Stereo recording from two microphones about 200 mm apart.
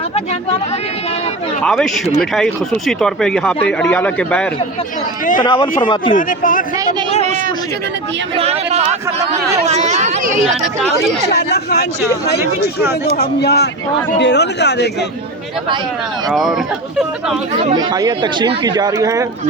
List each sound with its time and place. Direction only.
1.6 s speech: centre (ahead or behind)
5.4 s speech: 25° left (ahead or behind)
6.1 s a man's voice: 40° left (ahead or behind)
8.4 s speech: 30° right (ahead or behind)
11.3 s speech: 55° left (ahead or behind)
13.1 s speech: 55° left (ahead or behind)
16.3 s speech: centre (ahead or behind)
17.6 s speech: 20° right (ahead or behind)